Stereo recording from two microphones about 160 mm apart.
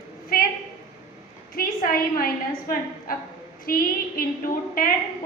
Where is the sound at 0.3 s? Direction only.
65° left (ahead or behind).